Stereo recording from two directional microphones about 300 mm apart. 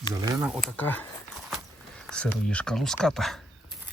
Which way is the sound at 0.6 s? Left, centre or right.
Centre.